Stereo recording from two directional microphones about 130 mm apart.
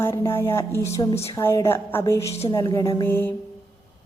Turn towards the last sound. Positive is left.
turn(degrees=15)  # may be behind; listen again after turning